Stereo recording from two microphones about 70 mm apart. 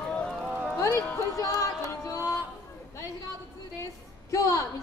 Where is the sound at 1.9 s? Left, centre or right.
Left.